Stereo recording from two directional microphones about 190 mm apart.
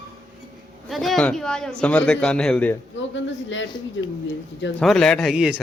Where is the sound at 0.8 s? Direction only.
Centre (ahead or behind).